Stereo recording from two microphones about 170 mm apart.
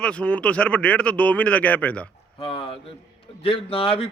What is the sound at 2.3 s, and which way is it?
A man's voice, 35° left (ahead or behind).